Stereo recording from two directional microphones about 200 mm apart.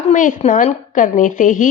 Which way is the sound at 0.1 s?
40° left (ahead or behind).